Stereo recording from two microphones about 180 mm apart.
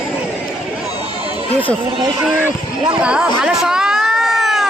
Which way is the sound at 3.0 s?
5° right (ahead or behind).